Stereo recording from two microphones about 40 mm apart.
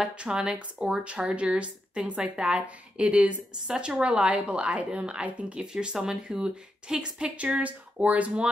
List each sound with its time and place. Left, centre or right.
0.1 s a woman's voice: right
5.7 s a woman's voice: centre; by 8.5 s right